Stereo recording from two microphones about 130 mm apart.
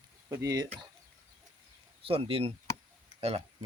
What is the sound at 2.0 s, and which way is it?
Speech, 45° right (ahead or behind).